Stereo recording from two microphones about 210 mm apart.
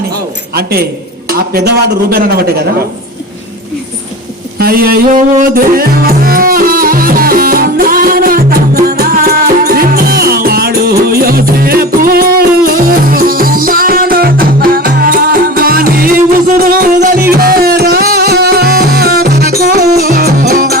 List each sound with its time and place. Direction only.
0.5 s a man's voice: 45° right (ahead or behind)
4.5 s music: 45° right (ahead or behind)